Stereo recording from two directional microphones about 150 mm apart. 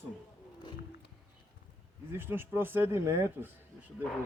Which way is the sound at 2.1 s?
15° right (ahead or behind).